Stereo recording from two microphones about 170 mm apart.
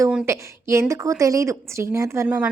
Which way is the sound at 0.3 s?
15° right (ahead or behind).